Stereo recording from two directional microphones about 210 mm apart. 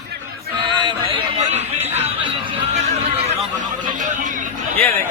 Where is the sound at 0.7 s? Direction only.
25° right (ahead or behind).